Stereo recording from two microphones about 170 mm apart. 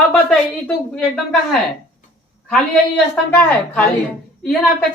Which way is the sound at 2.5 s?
5° left (ahead or behind).